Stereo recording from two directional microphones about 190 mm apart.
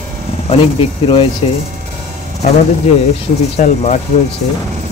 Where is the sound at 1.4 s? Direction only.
30° left (ahead or behind).